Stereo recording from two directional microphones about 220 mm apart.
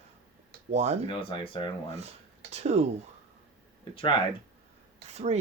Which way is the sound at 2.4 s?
30° right (ahead or behind).